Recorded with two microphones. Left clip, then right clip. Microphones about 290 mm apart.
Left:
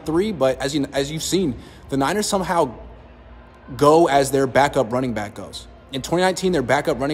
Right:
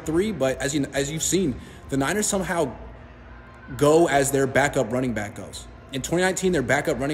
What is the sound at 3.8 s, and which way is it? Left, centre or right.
A man's voice, centre.